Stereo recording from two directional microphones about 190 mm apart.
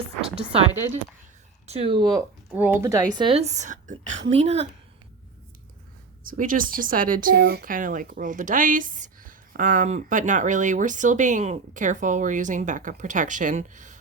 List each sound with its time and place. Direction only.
0.3 s a sound: 30° right (ahead or behind)
1.6 s speech: 30° right (ahead or behind)
2.5 s a woman's voice: 10° right (ahead or behind); by 4.7 s 35° right (ahead or behind)
6.2 s speech: 45° right (ahead or behind)